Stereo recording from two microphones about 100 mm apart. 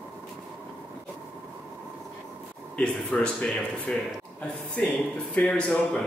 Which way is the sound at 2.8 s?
5° left (ahead or behind).